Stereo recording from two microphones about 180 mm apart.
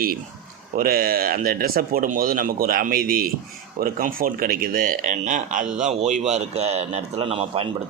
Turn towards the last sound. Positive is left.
turn(degrees=-30)  # may be behind; listen again after turning